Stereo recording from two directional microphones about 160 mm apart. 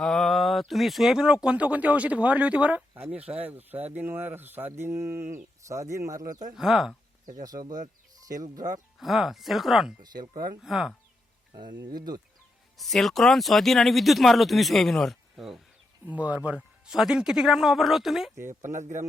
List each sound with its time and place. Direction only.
0.0 s speech: centre (ahead or behind); by 6.2 s 20° right (ahead or behind)
6.5 s speech: 5° right (ahead or behind)
7.4 s speech: 25° right (ahead or behind)
9.0 s speech: centre (ahead or behind)
10.0 s speech: 25° right (ahead or behind)
10.6 s speech: centre (ahead or behind)
11.5 s speech: 25° right (ahead or behind)
12.7 s speech: centre (ahead or behind)
18.7 s speech: 50° right (ahead or behind)